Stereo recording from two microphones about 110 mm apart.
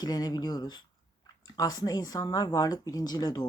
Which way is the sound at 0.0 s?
35° left (ahead or behind).